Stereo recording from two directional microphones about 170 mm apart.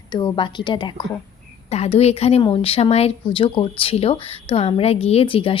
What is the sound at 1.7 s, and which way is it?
Speech, 40° left (ahead or behind).